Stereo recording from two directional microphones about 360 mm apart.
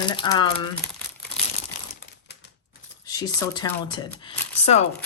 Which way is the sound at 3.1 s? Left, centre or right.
Centre.